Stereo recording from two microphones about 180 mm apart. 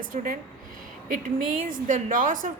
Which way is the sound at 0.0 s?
50° right (ahead or behind).